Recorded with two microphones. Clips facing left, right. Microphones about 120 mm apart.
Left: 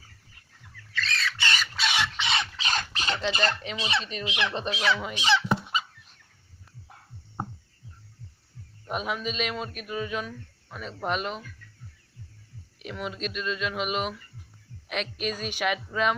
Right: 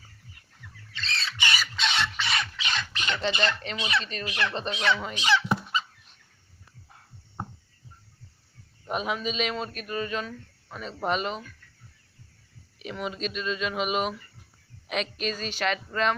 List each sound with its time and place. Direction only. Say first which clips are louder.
0.9 s bird: left 4 dB; 25° right (ahead or behind)
1.4 s squawk: right 2 dB; 10° right (ahead or behind)
1.7 s a sound: even; 5° left (ahead or behind)
2.1 s a sound: left 1 dB; 20° left (ahead or behind)
2.6 s a sound: left 2 dB; 40° left (ahead or behind)
3.3 s speech: even; 40° left (ahead or behind)
3.8 s fowl: right 2 dB; 30° left (ahead or behind)
4.0 s speech: even; 15° left (ahead or behind)
4.7 s a man's voice: even; centre (ahead or behind)
8.9 s a man's voice: right 1 dB; centre (ahead or behind)
12.8 s a man's voice: right 1 dB; centre (ahead or behind)